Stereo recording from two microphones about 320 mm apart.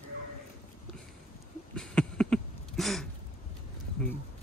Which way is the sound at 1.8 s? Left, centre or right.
Centre.